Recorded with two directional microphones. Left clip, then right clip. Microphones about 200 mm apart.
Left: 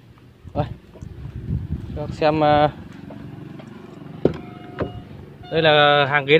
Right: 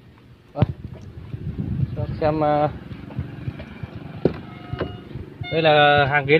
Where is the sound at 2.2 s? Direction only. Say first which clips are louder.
Left 3 dB; 25° left (ahead or behind).